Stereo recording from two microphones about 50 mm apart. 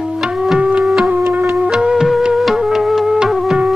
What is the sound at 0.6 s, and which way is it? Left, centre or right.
Music, right.